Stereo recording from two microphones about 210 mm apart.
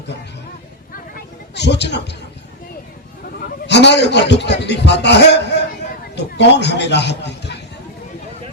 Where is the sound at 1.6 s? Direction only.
55° left (ahead or behind).